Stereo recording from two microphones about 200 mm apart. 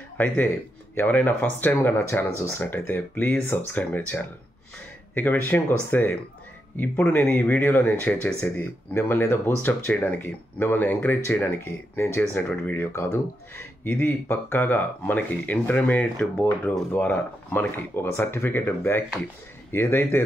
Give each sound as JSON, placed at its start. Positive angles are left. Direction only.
{"t": 0.9, "sound": "speech", "side_deg": 10}